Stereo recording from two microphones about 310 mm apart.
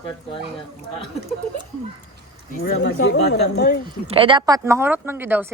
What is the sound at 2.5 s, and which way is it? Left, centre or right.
Speech, left.